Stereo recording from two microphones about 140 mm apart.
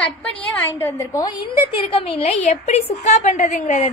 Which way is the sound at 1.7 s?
40° left (ahead or behind).